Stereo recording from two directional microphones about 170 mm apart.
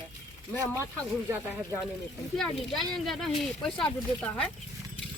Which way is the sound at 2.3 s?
Centre (ahead or behind).